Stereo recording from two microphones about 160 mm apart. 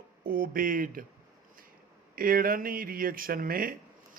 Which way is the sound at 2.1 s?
65° right (ahead or behind).